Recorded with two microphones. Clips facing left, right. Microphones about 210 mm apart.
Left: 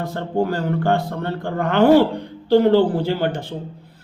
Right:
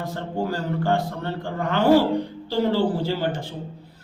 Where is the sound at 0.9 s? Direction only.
60° left (ahead or behind).